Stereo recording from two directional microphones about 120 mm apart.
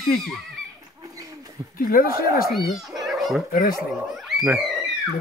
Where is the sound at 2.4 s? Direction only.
Centre (ahead or behind).